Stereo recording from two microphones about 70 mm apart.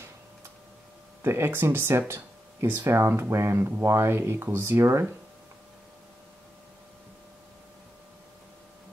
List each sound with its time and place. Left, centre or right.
1.2 s speech: right